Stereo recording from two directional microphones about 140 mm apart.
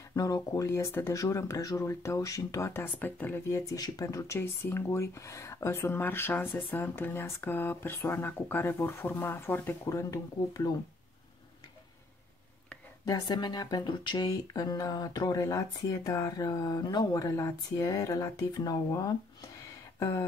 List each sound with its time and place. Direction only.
0.1 s speech: 25° left (ahead or behind)
13.0 s speech: 30° left (ahead or behind)